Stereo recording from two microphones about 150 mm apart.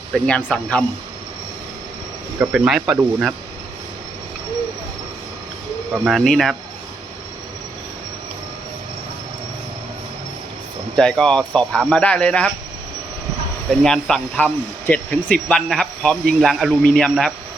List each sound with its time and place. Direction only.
0.1 s speech: 5° left (ahead or behind)
2.4 s speech: 5° right (ahead or behind)
6.1 s speech: centre (ahead or behind)
10.9 s speech: 5° left (ahead or behind)
13.7 s speech: 5° left (ahead or behind)